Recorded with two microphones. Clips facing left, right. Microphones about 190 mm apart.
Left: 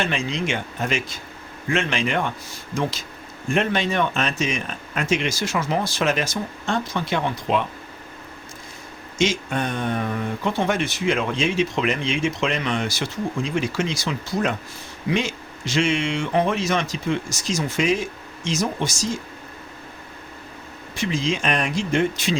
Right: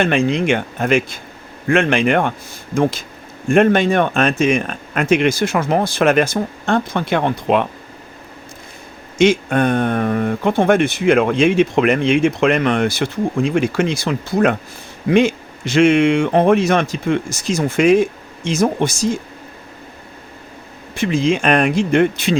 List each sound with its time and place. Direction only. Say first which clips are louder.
0.0 s speech: right 9 dB; 55° right (ahead or behind)
9.1 s speech: right 9 dB; 60° right (ahead or behind)
20.9 s speech: right 7 dB; 55° right (ahead or behind)